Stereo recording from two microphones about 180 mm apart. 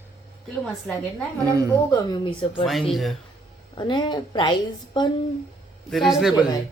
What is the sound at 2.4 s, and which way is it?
Speech, 30° left (ahead or behind).